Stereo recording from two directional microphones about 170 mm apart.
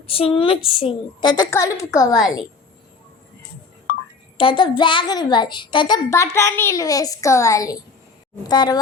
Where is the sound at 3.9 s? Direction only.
65° left (ahead or behind).